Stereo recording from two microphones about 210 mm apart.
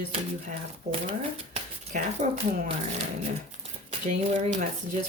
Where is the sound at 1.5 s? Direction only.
35° right (ahead or behind).